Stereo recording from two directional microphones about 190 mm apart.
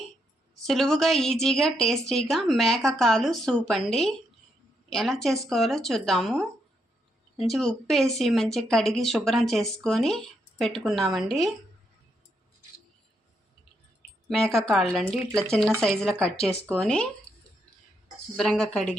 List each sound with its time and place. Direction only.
0.6 s speech: centre (ahead or behind)
14.7 s speech: centre (ahead or behind)
18.3 s speech: centre (ahead or behind)